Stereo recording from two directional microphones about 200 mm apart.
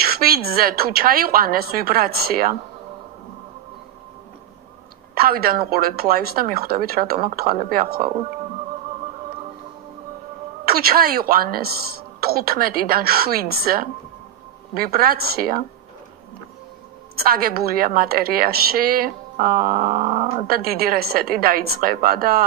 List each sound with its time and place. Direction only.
0.0 s a woman's voice: 50° right (ahead or behind)
5.1 s a woman's voice: 50° right (ahead or behind)
10.6 s a woman's voice: 50° right (ahead or behind)
17.2 s a woman's voice: 50° right (ahead or behind)